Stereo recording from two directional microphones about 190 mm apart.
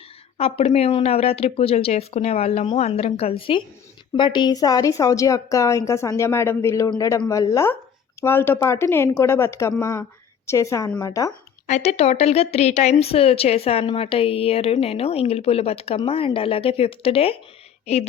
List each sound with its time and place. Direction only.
0.3 s a woman's voice: 30° left (ahead or behind)
11.6 s a woman's voice: 35° left (ahead or behind)